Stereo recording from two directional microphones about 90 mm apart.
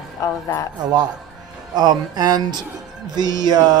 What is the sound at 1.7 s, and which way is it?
Speech, 50° right (ahead or behind).